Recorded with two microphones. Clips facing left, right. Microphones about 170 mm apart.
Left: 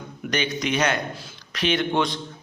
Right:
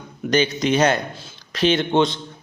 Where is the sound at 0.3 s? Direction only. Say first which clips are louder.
Right 7 dB; 30° right (ahead or behind).